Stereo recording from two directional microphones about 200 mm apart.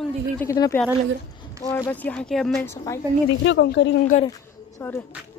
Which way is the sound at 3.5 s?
65° left (ahead or behind).